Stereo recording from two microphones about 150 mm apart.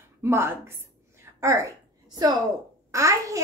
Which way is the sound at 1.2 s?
20° right (ahead or behind).